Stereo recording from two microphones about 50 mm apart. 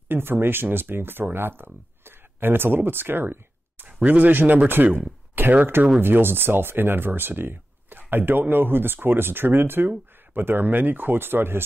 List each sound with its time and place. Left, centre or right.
0.1 s speech: right
3.8 s speech: right
5.9 s speech: right